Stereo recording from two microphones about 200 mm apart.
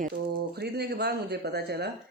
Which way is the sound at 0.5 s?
55° right (ahead or behind).